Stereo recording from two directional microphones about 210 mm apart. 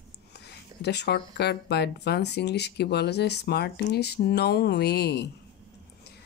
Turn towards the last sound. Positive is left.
turn(degrees=50)  # may be behind; listen again after turning